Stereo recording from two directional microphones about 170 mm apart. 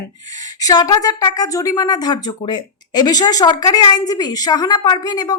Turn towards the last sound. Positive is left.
turn(degrees=25)  # may be behind; listen again after turning